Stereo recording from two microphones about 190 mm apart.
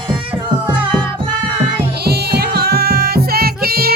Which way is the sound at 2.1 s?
55° right (ahead or behind).